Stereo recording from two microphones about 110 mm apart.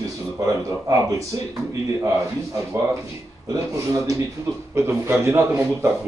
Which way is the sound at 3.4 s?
30° right (ahead or behind).